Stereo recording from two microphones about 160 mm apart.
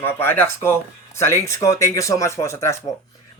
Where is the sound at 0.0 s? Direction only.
15° left (ahead or behind).